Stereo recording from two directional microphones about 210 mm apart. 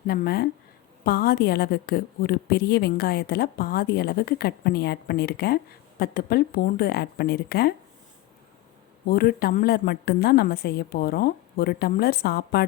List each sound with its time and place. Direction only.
0.1 s a woman's voice: 45° left (ahead or behind)
9.0 s a woman's voice: 45° left (ahead or behind)